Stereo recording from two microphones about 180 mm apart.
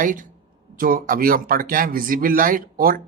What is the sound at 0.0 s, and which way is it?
Speech, 45° right (ahead or behind).